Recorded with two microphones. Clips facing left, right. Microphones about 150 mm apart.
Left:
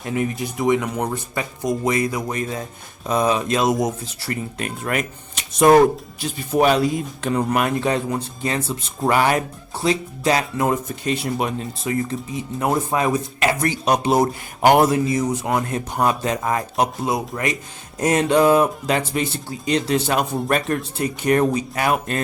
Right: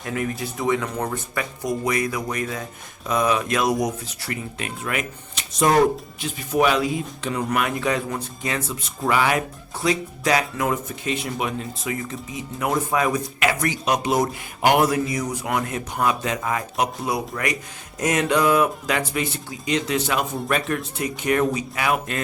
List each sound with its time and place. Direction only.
0.0 s speech: 20° left (ahead or behind)
4.3 s speech: 40° left (ahead or behind)
5.6 s speech: 55° left (ahead or behind)
6.1 s speech: 35° left (ahead or behind)
9.0 s speech: 40° left (ahead or behind)
9.8 s a man's voice: 30° left (ahead or behind)
14.8 s speech: 25° left (ahead or behind)
17.1 s speech: 25° left (ahead or behind); by 22.2 s 40° left (ahead or behind)